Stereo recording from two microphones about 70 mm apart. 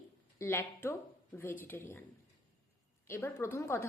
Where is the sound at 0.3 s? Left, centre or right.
Left.